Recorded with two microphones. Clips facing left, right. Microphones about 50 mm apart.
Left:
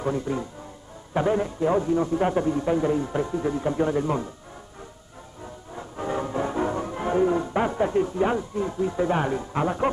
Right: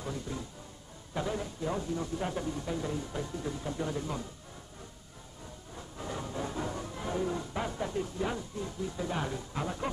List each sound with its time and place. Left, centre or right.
0.0 s a man's voice: left
5.8 s music: left